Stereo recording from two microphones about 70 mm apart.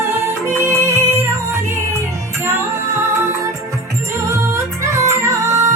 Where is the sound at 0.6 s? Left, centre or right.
Right.